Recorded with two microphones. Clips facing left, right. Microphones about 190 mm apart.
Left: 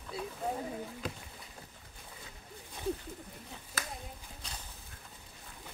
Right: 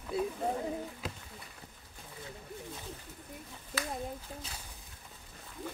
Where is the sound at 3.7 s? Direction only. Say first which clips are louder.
Right 5 dB; 50° left (ahead or behind).